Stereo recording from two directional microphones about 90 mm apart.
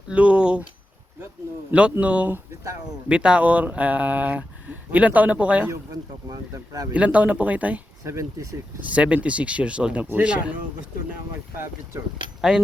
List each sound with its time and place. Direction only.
0.1 s a sound: 10° right (ahead or behind)
1.7 s speech: 15° right (ahead or behind)
6.2 s speech: 45° right (ahead or behind)
6.9 s speech: 15° right (ahead or behind)
8.0 s speech: 35° right (ahead or behind)
8.8 s speech: 15° right (ahead or behind)
11.5 s speech: 30° right (ahead or behind)